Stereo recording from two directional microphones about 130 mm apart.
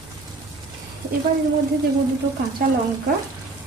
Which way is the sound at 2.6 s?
90° right.